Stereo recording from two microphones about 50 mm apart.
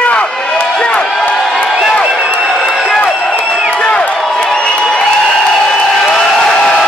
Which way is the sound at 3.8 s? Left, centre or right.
Centre.